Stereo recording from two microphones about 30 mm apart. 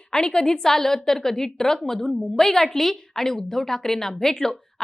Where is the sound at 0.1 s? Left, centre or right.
Left.